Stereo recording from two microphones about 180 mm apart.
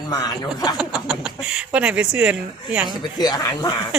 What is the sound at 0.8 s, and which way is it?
Speech, 5° right (ahead or behind).